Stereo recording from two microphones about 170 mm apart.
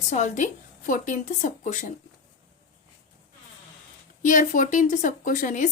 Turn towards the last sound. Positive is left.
turn(degrees=50)  # may be behind; listen again after turning